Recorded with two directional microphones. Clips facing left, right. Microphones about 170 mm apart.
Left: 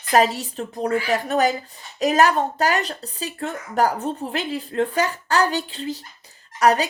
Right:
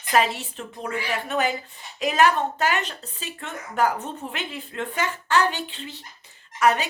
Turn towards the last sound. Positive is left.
turn(degrees=40)  # may be behind; listen again after turning